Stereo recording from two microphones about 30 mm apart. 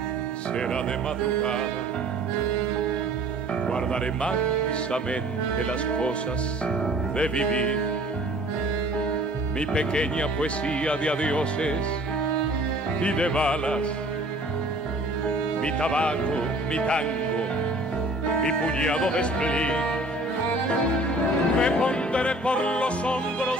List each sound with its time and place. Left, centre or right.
3.6 s speech: left
7.2 s speech: left
9.6 s speech: left
13.0 s speech: left
15.6 s speech: left
18.4 s speech: left
21.5 s speech: left